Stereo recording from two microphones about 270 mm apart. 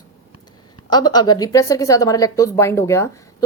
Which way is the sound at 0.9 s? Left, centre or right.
Centre.